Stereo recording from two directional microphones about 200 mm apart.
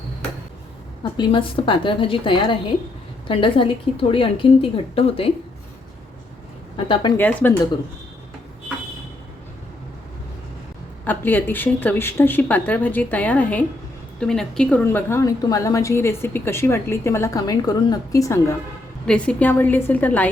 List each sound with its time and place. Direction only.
1.1 s a woman's voice: 25° left (ahead or behind)
6.7 s a woman's voice: 25° left (ahead or behind)
7.2 s a woman's voice: 10° left (ahead or behind)
11.0 s a woman's voice: 10° left (ahead or behind)